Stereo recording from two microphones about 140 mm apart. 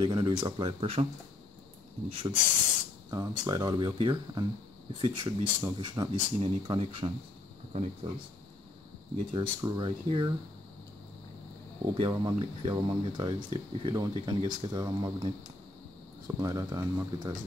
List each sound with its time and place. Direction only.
0.0 s speech: 35° right (ahead or behind)
2.0 s speech: 40° right (ahead or behind)
3.1 s speech: 30° right (ahead or behind); by 8.1 s 45° right (ahead or behind)
9.1 s speech: 40° right (ahead or behind)
11.8 s speech: 35° right (ahead or behind)
16.3 s speech: 25° right (ahead or behind)